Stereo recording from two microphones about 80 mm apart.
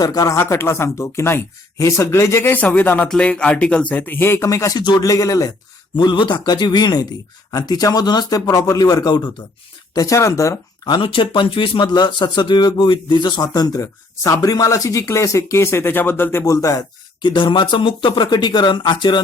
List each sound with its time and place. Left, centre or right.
0.0 s speech: left
0.3 s speech: left
4.8 s speech: left
6.0 s speech: left
9.9 s speech: left
10.8 s speech: left
13.4 s speech: left
16.4 s speech: left
17.2 s speech: left